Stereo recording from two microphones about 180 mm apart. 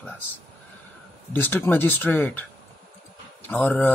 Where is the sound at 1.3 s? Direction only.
10° left (ahead or behind).